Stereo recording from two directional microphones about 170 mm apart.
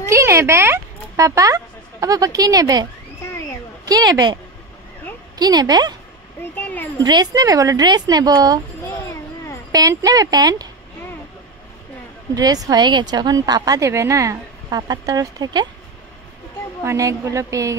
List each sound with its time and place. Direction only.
0.0 s a woman's voice: 15° right (ahead or behind)
5.4 s a woman's voice: 25° right (ahead or behind)
6.5 s speech: 10° left (ahead or behind)
7.0 s a woman's voice: 25° right (ahead or behind)
9.7 s a woman's voice: 20° right (ahead or behind)
12.4 s a woman's voice: 20° right (ahead or behind)
16.8 s a woman's voice: 20° right (ahead or behind)